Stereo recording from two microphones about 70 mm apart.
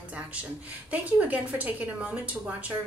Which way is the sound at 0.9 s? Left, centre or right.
Centre.